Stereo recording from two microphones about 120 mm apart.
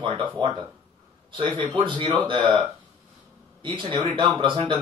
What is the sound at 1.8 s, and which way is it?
Speech, 45° right (ahead or behind).